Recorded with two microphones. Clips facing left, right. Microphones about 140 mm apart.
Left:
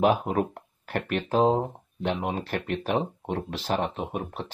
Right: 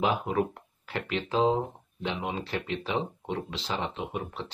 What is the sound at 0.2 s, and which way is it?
Speech, 40° left (ahead or behind).